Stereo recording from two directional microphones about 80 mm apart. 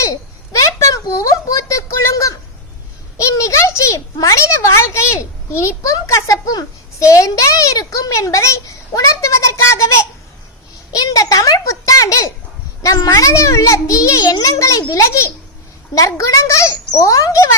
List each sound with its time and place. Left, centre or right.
0.0 s a sound: left
3.2 s a child's voice: left
10.9 s a child's voice: left